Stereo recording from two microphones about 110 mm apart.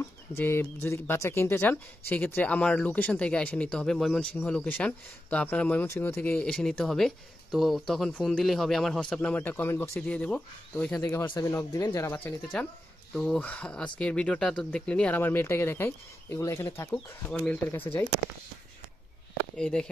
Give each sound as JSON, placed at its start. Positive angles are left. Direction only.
{"t": 0.4, "sound": "speech", "side_deg": 20}
{"t": 6.3, "sound": "speech", "side_deg": 5}
{"t": 11.0, "sound": "speech", "side_deg": 25}
{"t": 13.1, "sound": "speech", "side_deg": 5}
{"t": 17.3, "sound": "speech", "side_deg": 15}
{"t": 19.5, "sound": "speech", "side_deg": 5}